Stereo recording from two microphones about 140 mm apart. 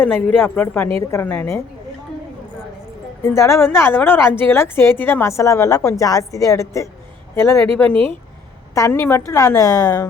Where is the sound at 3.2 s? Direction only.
20° left (ahead or behind).